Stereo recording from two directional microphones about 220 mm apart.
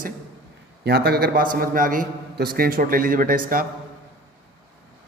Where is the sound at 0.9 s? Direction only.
45° right (ahead or behind).